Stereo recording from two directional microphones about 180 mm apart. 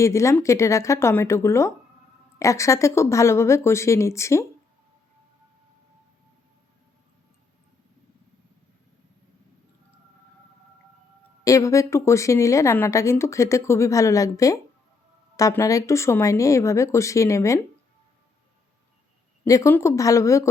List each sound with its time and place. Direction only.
0.0 s speech: 15° left (ahead or behind)
11.4 s speech: 15° left (ahead or behind)
19.5 s speech: 15° left (ahead or behind)